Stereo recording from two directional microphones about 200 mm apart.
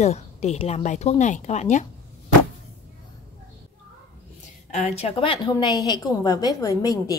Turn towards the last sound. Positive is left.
turn(degrees=20)  # may be behind; listen again after turning